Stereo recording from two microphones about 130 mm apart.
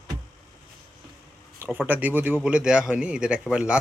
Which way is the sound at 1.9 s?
15° right (ahead or behind).